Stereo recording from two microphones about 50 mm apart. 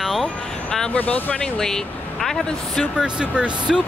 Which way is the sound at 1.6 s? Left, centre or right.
Centre.